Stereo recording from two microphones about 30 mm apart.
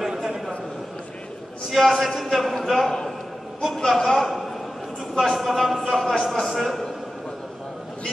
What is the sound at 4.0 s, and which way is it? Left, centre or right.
A man's voice, centre.